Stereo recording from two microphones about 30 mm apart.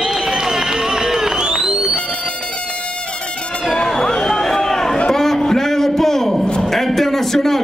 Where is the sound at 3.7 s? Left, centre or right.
Centre.